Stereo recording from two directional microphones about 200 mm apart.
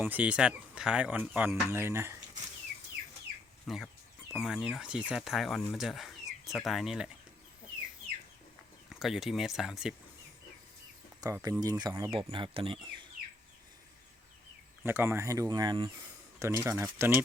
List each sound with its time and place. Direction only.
0.0 s speech: 5° right (ahead or behind)
3.7 s speech: centre (ahead or behind)
8.9 s speech: centre (ahead or behind)
11.2 s speech: 15° right (ahead or behind)
14.8 s speech: 10° right (ahead or behind)